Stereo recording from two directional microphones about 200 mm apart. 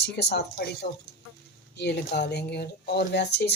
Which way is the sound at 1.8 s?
55° left (ahead or behind).